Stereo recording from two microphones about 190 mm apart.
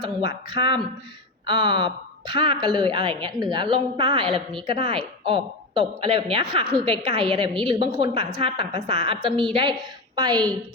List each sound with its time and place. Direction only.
0.5 s speech: 25° right (ahead or behind)